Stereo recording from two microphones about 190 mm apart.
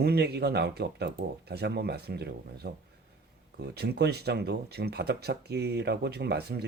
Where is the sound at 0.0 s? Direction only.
60° right (ahead or behind).